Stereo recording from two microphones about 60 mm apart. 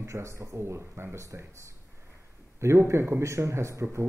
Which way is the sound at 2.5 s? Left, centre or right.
Right.